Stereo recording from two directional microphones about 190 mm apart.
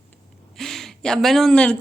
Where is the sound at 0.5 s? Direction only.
Centre (ahead or behind).